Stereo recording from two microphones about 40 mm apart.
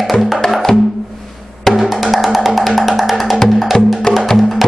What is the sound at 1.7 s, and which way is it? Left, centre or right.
Music, centre.